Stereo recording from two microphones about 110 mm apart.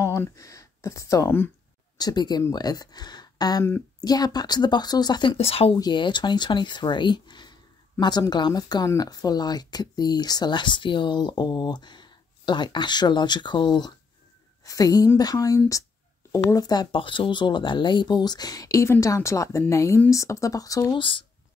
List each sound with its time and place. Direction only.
0.0 s speech: 30° left (ahead or behind)
2.0 s speech: 40° left (ahead or behind)
5.4 s speech: 65° left (ahead or behind)
5.8 s speech: 45° left (ahead or behind)
16.9 s speech: 50° left (ahead or behind); by 21.0 s 30° left (ahead or behind)